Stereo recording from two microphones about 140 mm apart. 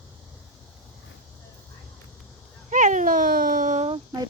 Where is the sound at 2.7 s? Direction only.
65° right (ahead or behind).